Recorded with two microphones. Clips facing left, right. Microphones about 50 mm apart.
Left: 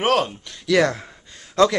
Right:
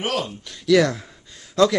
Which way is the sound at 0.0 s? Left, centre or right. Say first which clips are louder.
Left 6 dB; left.